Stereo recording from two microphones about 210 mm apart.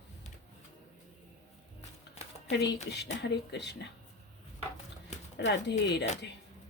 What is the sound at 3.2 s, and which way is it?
Speech, 55° left (ahead or behind).